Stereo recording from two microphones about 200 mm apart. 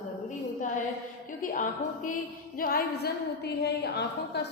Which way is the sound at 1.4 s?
40° left (ahead or behind).